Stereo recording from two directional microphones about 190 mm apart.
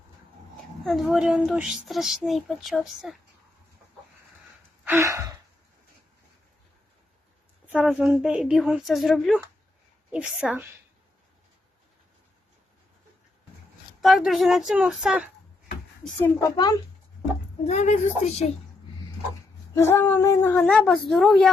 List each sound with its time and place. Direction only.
0.9 s speech: centre (ahead or behind)
4.9 s a woman's voice: 15° right (ahead or behind)
7.7 s a woman's voice: 5° right (ahead or behind)
14.0 s speech: centre (ahead or behind)
16.0 s female singing: 15° left (ahead or behind)
17.7 s a woman's voice: 40° left (ahead or behind)
19.7 s female singing: 15° left (ahead or behind)
20.7 s speech: 5° left (ahead or behind)